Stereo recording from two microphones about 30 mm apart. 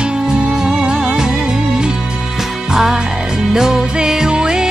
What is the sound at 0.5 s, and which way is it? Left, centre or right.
Music, right.